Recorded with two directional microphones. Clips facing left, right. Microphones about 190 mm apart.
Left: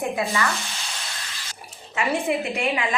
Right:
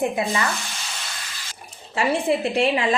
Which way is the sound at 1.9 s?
35° right (ahead or behind).